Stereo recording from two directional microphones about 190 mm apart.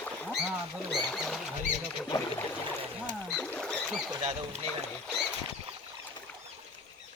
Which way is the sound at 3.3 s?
10° left (ahead or behind).